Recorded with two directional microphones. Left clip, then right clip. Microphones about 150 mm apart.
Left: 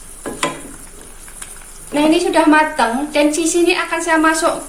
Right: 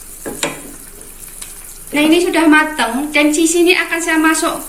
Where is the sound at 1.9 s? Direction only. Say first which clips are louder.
Right 2 dB; 55° left (ahead or behind).